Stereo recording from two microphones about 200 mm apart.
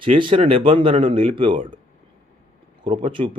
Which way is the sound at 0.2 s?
25° right (ahead or behind).